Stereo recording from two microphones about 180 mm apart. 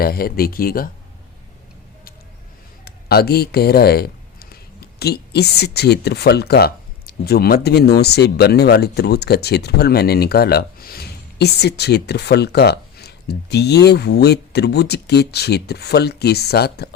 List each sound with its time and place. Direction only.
0.0 s speech: 55° left (ahead or behind)
2.8 s speech: 60° left (ahead or behind)